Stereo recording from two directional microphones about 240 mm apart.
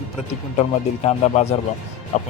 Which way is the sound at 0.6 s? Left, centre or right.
Left.